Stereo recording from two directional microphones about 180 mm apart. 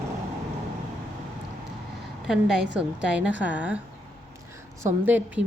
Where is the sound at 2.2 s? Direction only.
5° right (ahead or behind).